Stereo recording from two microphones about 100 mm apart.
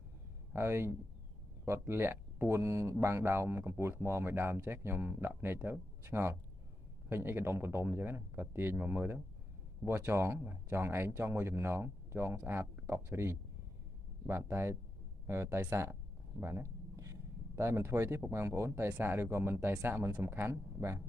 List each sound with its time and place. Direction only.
0.5 s speech: 25° right (ahead or behind)
15.2 s a sound: 25° right (ahead or behind)
18.3 s speech: 25° right (ahead or behind)